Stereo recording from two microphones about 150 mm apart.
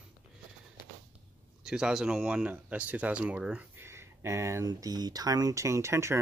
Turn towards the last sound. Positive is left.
turn(degrees=-20)  # may be behind; listen again after turning